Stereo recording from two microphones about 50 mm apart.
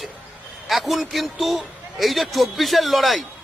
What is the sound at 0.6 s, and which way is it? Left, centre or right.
Speech, centre.